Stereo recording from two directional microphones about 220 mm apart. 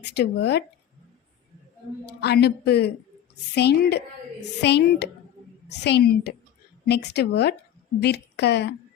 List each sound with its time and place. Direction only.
0.0 s a woman's voice: 50° left (ahead or behind)
2.0 s a woman's voice: 45° left (ahead or behind)